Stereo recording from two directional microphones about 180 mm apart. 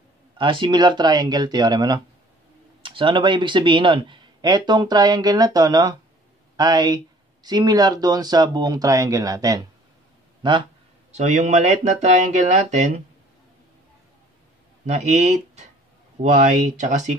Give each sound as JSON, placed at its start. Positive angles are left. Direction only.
{"t": 0.4, "sound": "speech", "side_deg": -25}
{"t": 11.1, "sound": "speech", "side_deg": -40}
{"t": 14.9, "sound": "speech", "side_deg": -40}